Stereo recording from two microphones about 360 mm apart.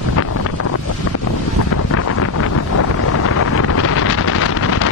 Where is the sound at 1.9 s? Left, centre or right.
Left.